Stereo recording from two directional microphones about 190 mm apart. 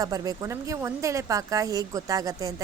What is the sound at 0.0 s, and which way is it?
A woman's voice, 20° right (ahead or behind).